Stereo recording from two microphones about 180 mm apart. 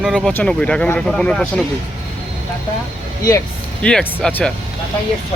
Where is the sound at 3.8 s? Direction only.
5° left (ahead or behind).